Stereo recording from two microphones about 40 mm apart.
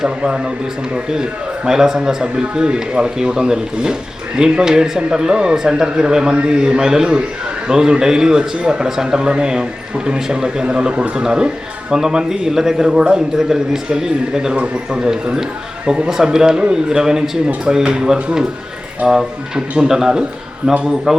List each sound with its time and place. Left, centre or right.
0.9 s a man's voice: centre
14.5 s speech: right
15.1 s a man's voice: centre